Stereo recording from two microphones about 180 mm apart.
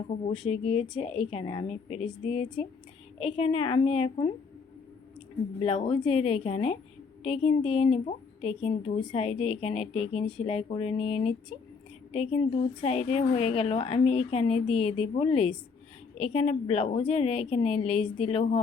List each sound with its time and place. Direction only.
0.4 s a woman's voice: 35° left (ahead or behind)
5.6 s a woman's voice: 30° left (ahead or behind)